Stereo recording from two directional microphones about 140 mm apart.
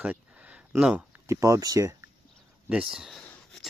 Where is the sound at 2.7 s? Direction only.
5° right (ahead or behind).